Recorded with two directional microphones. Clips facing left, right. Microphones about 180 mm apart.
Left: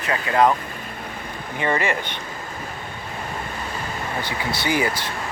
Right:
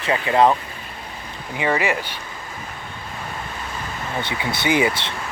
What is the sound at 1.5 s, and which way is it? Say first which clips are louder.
Speech: right 1 dB; 10° right (ahead or behind).